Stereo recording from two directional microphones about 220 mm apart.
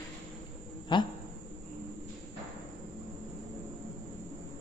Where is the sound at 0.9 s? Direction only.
20° left (ahead or behind).